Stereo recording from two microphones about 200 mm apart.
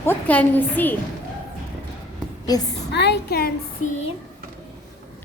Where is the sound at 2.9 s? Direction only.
55° left (ahead or behind).